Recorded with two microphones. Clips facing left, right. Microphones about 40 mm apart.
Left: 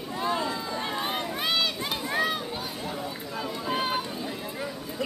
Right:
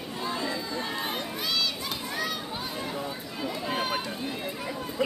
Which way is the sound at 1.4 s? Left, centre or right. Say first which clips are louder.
Left 3 dB; left.